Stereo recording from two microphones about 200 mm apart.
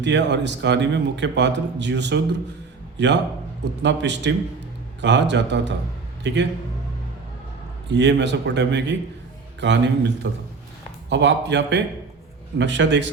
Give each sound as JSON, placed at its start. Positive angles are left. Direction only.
{"t": 0.0, "sound": "a man's voice", "side_deg": -60}
{"t": 7.9, "sound": "a man's voice", "side_deg": -60}